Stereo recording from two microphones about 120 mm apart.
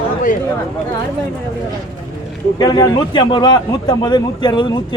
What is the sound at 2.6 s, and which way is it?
A man's voice, 35° left (ahead or behind).